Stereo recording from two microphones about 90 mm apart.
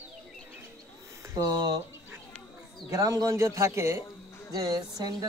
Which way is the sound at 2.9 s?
40° right (ahead or behind).